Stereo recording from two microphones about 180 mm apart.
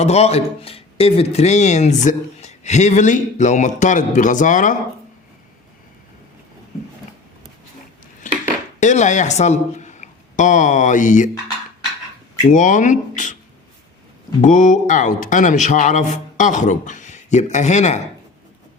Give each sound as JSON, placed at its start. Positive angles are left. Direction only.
{"t": 0.0, "sound": "a man's voice", "side_deg": 35}
{"t": 8.2, "sound": "dishes", "side_deg": 45}
{"t": 8.8, "sound": "a man's voice", "side_deg": 40}
{"t": 12.5, "sound": "a man's voice", "side_deg": 45}
{"t": 14.4, "sound": "a man's voice", "side_deg": 45}